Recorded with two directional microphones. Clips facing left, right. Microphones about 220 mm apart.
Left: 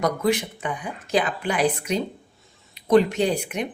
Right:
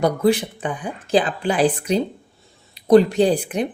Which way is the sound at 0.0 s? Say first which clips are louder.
Right 5 dB; 30° right (ahead or behind).